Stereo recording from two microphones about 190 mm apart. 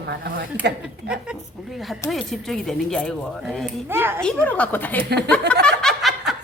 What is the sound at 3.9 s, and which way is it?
Speech, 10° right (ahead or behind).